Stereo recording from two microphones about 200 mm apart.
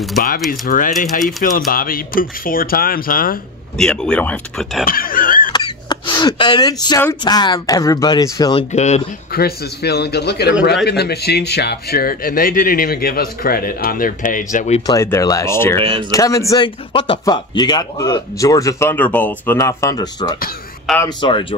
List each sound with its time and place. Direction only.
0.5 s speech: 40° left (ahead or behind)
3.7 s speech: 5° left (ahead or behind)
4.8 s a sound: 45° left (ahead or behind)
5.5 s a sound: 20° left (ahead or behind)
7.0 s speech: 15° left (ahead or behind)
8.7 s speech: 35° left (ahead or behind)
9.3 s speech: 50° left (ahead or behind)
14.9 s speech: 15° left (ahead or behind)
15.8 s speech: 30° right (ahead or behind)
16.1 s speech: 15° left (ahead or behind)